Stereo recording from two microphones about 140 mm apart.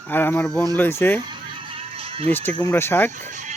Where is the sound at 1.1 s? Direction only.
35° right (ahead or behind).